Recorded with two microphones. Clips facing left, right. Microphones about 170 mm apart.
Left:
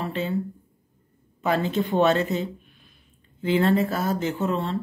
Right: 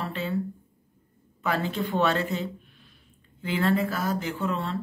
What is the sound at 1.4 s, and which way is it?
Speech, 20° left (ahead or behind).